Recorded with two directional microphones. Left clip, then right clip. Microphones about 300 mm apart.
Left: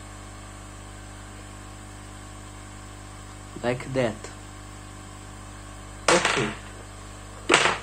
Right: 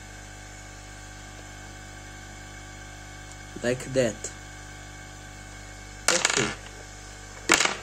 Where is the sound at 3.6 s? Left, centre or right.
Centre.